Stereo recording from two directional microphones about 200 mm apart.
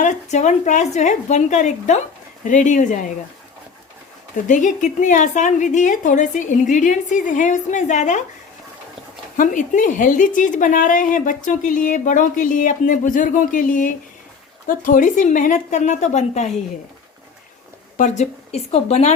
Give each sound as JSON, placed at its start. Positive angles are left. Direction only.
{"t": 0.0, "sound": "speech", "side_deg": 35}
{"t": 4.4, "sound": "speech", "side_deg": 40}
{"t": 9.4, "sound": "speech", "side_deg": 40}
{"t": 17.9, "sound": "speech", "side_deg": 35}